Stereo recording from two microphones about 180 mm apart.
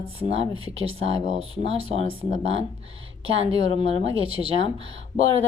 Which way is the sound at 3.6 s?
25° left (ahead or behind).